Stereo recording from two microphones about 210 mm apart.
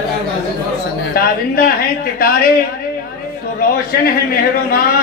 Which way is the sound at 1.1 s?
45° left (ahead or behind).